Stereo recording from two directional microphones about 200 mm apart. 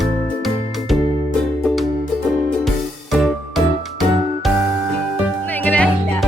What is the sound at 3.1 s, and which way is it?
Music, centre (ahead or behind).